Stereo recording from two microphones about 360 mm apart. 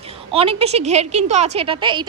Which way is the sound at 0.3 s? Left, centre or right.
Centre.